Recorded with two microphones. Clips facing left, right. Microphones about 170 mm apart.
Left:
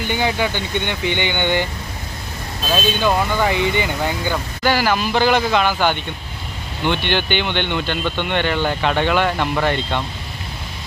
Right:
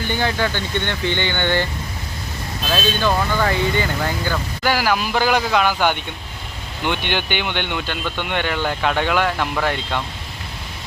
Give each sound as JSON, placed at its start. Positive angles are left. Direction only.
{"t": 0.1, "sound": "speech", "side_deg": 15}
{"t": 2.6, "sound": "speech", "side_deg": 15}
{"t": 4.6, "sound": "speech", "side_deg": -5}